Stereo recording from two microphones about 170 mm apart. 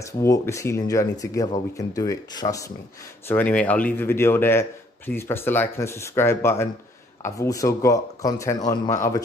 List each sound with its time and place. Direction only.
0.2 s a man's voice: 15° left (ahead or behind)
3.3 s a man's voice: 10° left (ahead or behind)